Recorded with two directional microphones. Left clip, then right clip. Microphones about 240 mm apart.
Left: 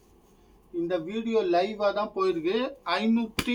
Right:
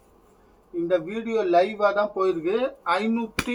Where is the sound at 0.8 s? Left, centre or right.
Left.